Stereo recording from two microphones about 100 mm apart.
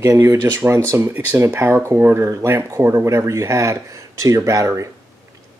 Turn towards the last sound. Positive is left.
turn(degrees=-30)  # may be behind; listen again after turning